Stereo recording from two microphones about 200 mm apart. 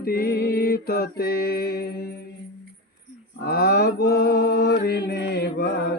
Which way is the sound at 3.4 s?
50° left (ahead or behind).